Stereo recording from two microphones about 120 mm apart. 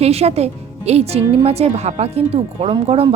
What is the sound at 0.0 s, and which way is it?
A woman's voice, 60° right (ahead or behind).